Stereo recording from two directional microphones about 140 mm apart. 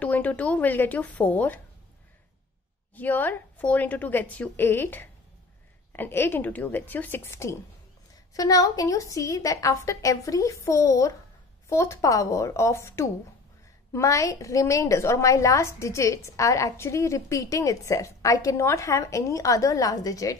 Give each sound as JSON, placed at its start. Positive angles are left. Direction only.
{"t": 0.0, "sound": "a woman's voice", "side_deg": 10}
{"t": 3.0, "sound": "a woman's voice", "side_deg": 15}